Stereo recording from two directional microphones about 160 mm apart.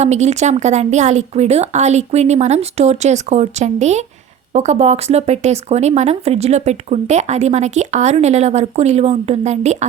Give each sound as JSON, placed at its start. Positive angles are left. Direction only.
{"t": 0.0, "sound": "speech", "side_deg": -45}